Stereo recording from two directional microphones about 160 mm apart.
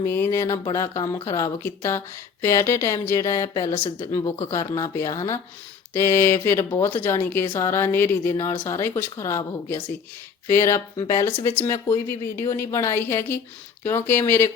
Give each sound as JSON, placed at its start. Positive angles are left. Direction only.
{"t": 0.0, "sound": "speech", "side_deg": 15}